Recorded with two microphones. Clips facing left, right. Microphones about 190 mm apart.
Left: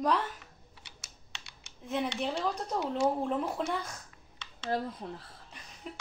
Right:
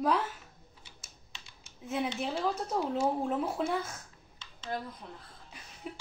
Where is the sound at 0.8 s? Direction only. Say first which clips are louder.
Left 1 dB; 75° left (ahead or behind).